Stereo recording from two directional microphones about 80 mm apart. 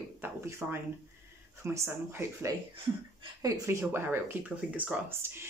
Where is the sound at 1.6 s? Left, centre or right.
Right.